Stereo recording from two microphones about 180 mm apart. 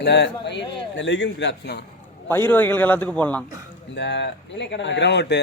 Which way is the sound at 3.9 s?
75° left (ahead or behind).